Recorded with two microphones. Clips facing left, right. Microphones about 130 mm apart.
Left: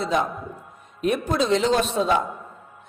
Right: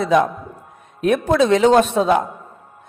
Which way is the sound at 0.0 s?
65° right (ahead or behind).